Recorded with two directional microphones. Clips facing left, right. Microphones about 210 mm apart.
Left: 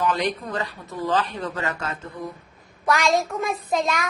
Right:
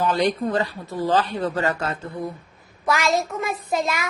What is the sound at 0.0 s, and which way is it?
Speech, 30° right (ahead or behind).